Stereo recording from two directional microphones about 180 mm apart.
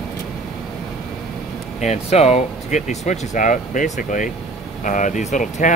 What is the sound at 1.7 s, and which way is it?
Speech, 35° left (ahead or behind).